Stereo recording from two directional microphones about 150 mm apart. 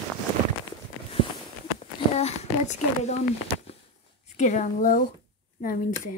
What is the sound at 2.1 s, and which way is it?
Speech, 45° left (ahead or behind).